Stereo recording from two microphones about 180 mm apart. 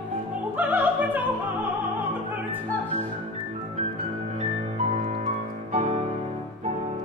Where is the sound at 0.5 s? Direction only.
10° right (ahead or behind).